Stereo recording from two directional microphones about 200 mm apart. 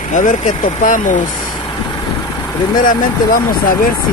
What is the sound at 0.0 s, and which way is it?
Speech, 40° left (ahead or behind).